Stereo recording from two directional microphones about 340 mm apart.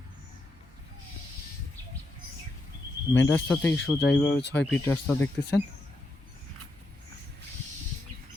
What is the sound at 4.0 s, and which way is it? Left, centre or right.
Speech, left.